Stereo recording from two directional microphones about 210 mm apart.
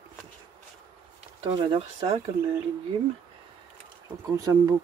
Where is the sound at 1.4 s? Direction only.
20° right (ahead or behind).